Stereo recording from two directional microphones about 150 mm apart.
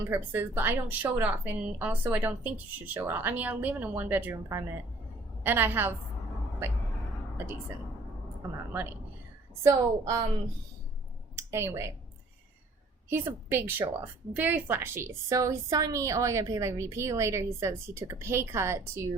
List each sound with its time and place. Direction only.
0.1 s a woman's voice: 15° right (ahead or behind)
8.7 s a woman's voice: 10° right (ahead or behind)
11.3 s speech: 20° right (ahead or behind)
13.1 s a woman's voice: 15° right (ahead or behind)